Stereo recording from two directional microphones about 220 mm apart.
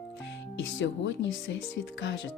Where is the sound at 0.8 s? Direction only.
55° left (ahead or behind).